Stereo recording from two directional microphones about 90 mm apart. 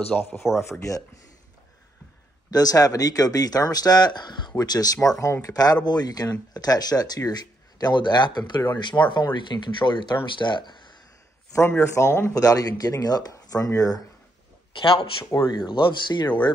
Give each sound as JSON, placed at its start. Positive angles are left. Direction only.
{"t": 0.1, "sound": "speech", "side_deg": 20}
{"t": 0.6, "sound": "speech", "side_deg": 35}
{"t": 2.5, "sound": "speech", "side_deg": 45}
{"t": 11.8, "sound": "speech", "side_deg": 30}
{"t": 15.5, "sound": "speech", "side_deg": 60}